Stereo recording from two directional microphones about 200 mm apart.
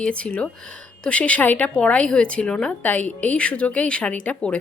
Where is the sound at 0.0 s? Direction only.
5° left (ahead or behind).